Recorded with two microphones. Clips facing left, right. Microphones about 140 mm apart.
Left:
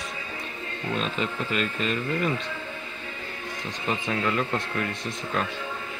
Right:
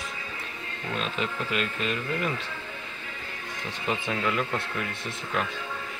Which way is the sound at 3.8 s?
5° right (ahead or behind).